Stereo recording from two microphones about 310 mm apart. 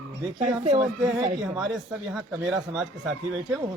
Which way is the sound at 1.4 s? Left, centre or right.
Centre.